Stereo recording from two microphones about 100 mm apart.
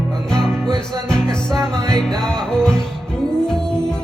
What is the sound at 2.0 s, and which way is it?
Music, 5° left (ahead or behind).